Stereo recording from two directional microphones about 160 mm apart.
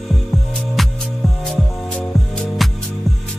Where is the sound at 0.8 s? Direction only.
Centre (ahead or behind).